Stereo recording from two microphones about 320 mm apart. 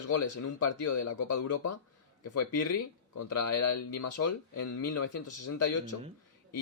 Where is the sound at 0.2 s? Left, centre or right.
Left.